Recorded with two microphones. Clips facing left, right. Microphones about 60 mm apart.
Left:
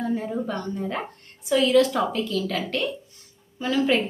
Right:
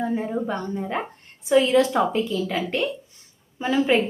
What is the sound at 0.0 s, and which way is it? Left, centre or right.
A woman's voice, right.